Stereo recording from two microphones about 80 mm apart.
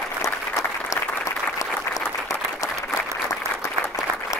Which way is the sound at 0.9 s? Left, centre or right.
Left.